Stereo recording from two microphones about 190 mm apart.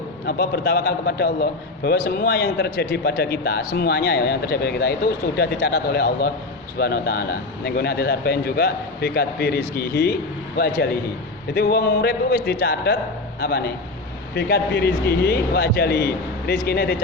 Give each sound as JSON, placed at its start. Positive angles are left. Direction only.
{"t": 0.3, "sound": "a man's voice", "side_deg": 55}
{"t": 11.5, "sound": "a man's voice", "side_deg": 55}